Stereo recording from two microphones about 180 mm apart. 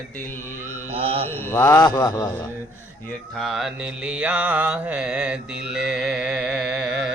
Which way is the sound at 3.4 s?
Centre (ahead or behind).